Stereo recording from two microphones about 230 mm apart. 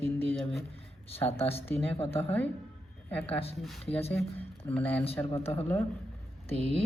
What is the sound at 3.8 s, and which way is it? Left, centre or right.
Speech, left.